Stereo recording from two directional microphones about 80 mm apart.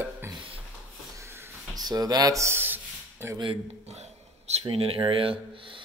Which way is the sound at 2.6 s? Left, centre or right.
Right.